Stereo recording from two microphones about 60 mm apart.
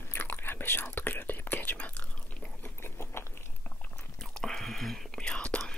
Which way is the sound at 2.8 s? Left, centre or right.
Left.